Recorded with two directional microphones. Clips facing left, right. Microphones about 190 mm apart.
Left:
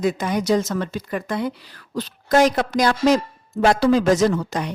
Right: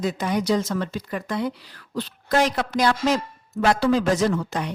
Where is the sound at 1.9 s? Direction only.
45° left (ahead or behind).